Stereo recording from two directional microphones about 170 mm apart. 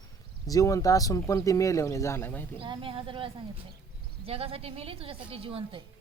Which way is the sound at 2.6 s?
30° right (ahead or behind).